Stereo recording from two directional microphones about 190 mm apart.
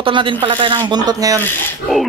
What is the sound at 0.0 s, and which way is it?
Speech, 25° right (ahead or behind).